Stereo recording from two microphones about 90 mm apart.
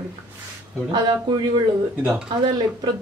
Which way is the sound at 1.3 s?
60° right (ahead or behind).